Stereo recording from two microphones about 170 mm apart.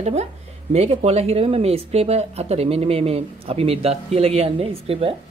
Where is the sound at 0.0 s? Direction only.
40° right (ahead or behind).